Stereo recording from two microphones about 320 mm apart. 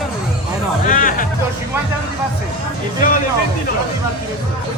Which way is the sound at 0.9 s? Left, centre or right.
Left.